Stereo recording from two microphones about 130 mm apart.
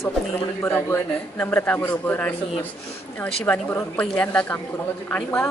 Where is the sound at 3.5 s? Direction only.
15° left (ahead or behind).